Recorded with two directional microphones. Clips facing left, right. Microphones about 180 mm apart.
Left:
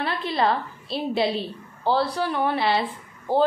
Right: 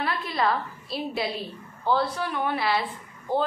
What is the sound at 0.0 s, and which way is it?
A woman's voice, 30° left (ahead or behind).